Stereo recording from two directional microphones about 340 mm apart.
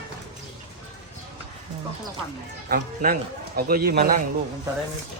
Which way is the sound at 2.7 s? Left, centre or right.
Right.